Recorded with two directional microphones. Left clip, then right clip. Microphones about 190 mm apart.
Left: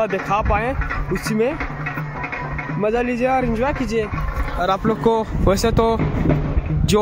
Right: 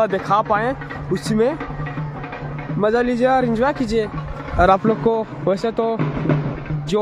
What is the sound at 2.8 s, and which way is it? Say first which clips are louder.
Speech: right 3 dB; 15° right (ahead or behind).